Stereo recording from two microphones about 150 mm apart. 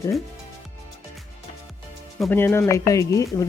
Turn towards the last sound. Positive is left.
turn(degrees=20)  # may be behind; listen again after turning